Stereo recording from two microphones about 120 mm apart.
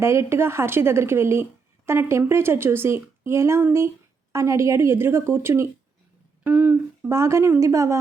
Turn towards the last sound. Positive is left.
turn(degrees=-25)  # may be behind; listen again after turning